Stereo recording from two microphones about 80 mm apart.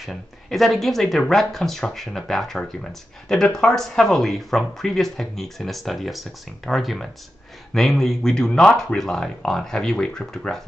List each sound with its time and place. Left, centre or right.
0.0 s speech: centre